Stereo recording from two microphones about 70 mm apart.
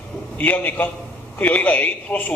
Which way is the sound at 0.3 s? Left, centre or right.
Left.